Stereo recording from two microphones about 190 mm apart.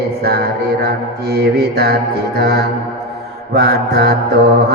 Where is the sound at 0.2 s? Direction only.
55° right (ahead or behind).